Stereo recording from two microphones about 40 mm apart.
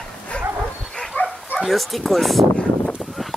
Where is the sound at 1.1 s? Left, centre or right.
Left.